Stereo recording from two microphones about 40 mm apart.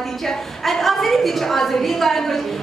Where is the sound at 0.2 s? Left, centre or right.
Centre.